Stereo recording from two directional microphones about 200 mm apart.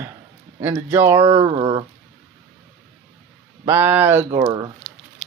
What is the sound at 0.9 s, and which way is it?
Speech, 15° right (ahead or behind).